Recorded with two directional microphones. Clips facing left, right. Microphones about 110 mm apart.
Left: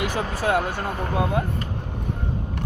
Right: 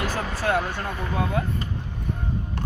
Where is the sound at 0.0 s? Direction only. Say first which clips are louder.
Left 2 dB; 15° left (ahead or behind).